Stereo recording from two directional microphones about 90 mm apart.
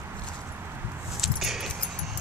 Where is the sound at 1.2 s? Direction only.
Centre (ahead or behind).